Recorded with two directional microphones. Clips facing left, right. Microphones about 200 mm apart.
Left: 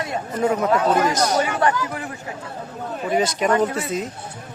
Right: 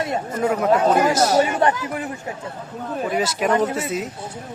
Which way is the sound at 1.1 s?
5° right (ahead or behind).